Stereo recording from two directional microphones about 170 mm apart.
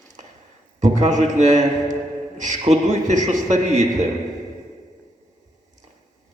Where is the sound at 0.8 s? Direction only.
45° right (ahead or behind).